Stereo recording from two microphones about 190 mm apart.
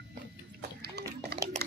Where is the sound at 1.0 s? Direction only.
60° right (ahead or behind).